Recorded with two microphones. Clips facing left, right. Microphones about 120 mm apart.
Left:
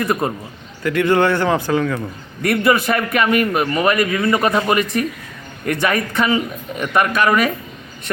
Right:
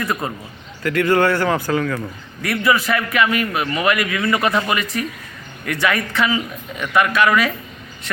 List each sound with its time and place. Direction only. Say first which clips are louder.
0.0 s speech: left 4 dB; 25° left (ahead or behind)
2.4 s speech: left 3 dB; 55° left (ahead or behind)